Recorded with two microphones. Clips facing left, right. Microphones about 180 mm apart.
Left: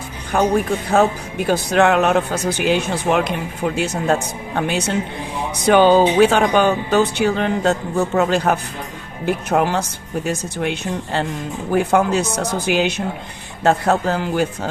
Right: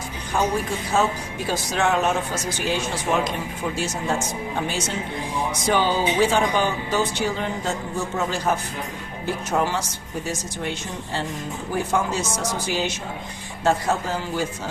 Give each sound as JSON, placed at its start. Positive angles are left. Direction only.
{"t": 0.3, "sound": "speech", "side_deg": 60}